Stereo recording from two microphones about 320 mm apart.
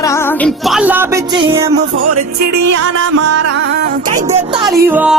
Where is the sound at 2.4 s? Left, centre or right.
Right.